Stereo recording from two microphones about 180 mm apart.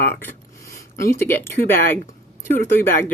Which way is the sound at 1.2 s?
15° left (ahead or behind).